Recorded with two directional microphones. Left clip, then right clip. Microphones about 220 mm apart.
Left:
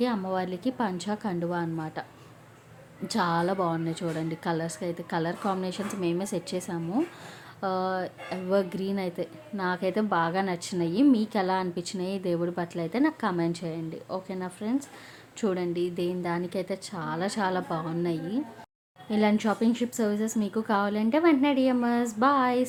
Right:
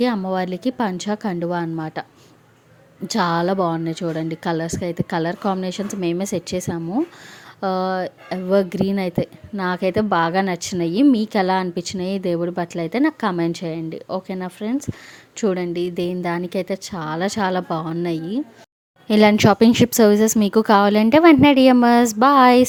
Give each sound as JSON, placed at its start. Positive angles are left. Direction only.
{"t": 0.0, "sound": "speech", "side_deg": -30}
{"t": 3.1, "sound": "a woman's voice", "side_deg": -30}
{"t": 19.0, "sound": "speech", "side_deg": -45}